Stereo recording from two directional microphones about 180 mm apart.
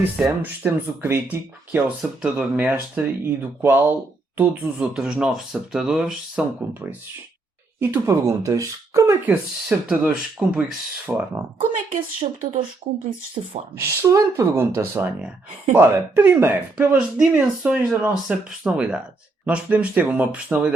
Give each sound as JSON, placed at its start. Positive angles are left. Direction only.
{"t": 0.0, "sound": "speech", "side_deg": -10}
{"t": 12.2, "sound": "speech", "side_deg": -30}
{"t": 13.7, "sound": "speech", "side_deg": -15}